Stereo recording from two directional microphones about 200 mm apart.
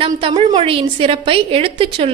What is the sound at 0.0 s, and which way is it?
A woman's voice, 25° right (ahead or behind).